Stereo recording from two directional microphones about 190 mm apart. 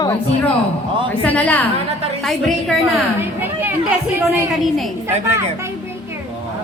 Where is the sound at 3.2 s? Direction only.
10° right (ahead or behind).